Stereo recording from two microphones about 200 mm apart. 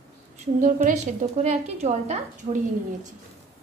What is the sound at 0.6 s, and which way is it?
A woman's voice, 35° right (ahead or behind).